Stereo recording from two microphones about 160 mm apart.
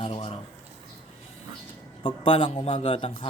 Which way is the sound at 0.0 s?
35° left (ahead or behind).